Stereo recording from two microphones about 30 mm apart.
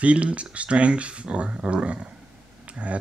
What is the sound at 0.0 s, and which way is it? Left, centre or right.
Speech, right.